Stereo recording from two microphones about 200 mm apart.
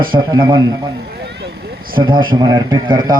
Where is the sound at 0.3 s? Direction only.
20° right (ahead or behind).